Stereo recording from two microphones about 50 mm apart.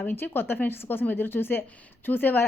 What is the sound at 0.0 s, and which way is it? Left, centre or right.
A woman's voice, left.